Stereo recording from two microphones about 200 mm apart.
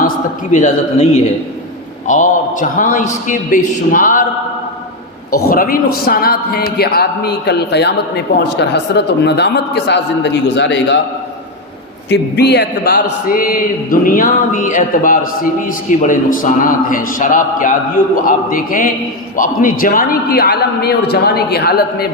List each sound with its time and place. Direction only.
0.5 s a man's voice: 35° left (ahead or behind)
5.5 s a man's voice: 45° left (ahead or behind); by 11.0 s 60° left (ahead or behind)
12.0 s a man's voice: 55° left (ahead or behind)